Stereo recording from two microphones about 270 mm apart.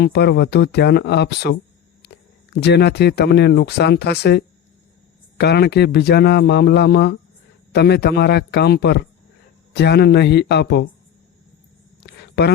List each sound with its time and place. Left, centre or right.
0.0 s speech: left
2.6 s speech: left
12.0 s a sound: left